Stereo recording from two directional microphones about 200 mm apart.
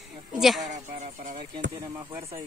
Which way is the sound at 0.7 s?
35° right (ahead or behind).